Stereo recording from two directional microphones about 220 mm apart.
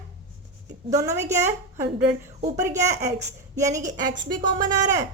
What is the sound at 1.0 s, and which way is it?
Speech, 15° right (ahead or behind).